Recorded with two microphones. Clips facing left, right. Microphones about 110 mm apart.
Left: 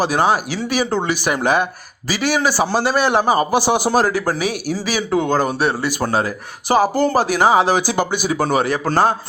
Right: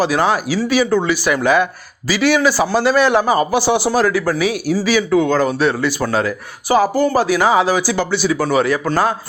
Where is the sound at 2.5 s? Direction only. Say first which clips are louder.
Right 3 dB; 15° left (ahead or behind).